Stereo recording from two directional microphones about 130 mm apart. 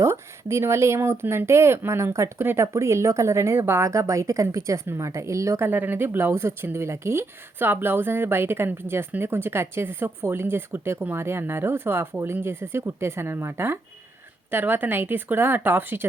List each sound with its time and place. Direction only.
0.0 s speech: 20° right (ahead or behind)